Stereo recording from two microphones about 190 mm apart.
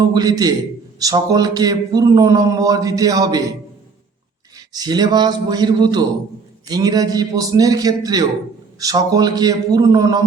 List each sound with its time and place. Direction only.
0.0 s speech: 20° right (ahead or behind)
4.5 s speech: 20° right (ahead or behind)